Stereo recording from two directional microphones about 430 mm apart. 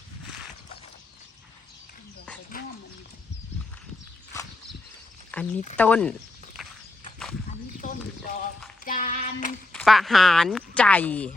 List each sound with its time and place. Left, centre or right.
5.3 s a sound: centre
5.7 s speech: centre
7.8 s clip-clop: centre
8.8 s child singing: centre
9.7 s speech: centre